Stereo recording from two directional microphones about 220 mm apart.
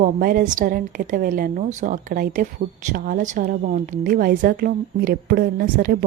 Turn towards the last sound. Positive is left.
turn(degrees=-40)  # may be behind; listen again after turning